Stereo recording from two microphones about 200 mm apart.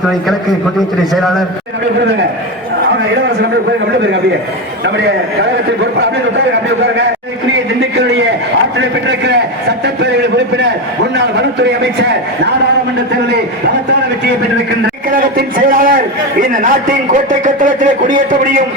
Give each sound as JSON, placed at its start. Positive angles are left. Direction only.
{"t": 0.8, "sound": "a man's voice", "side_deg": 0}
{"t": 6.8, "sound": "a man's voice", "side_deg": -60}
{"t": 9.0, "sound": "a man's voice", "side_deg": -60}
{"t": 15.1, "sound": "a man's voice", "side_deg": -45}